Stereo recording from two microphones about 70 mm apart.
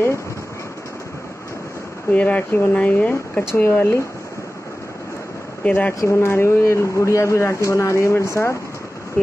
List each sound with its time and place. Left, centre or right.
2.1 s speech: left
5.6 s speech: centre
5.9 s speech: left